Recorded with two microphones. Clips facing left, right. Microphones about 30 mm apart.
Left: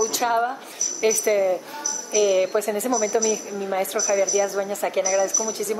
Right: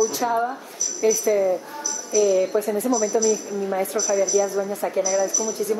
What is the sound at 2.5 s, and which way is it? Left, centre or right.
Speech, left.